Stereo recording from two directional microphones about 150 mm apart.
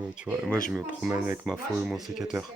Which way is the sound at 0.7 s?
5° right (ahead or behind).